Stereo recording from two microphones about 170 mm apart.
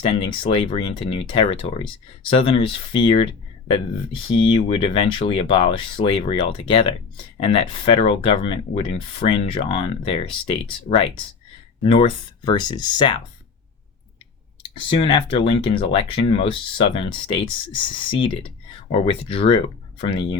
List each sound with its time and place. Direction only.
0.0 s speech: 30° left (ahead or behind)
4.4 s speech: 30° left (ahead or behind)
14.8 s speech: 35° left (ahead or behind)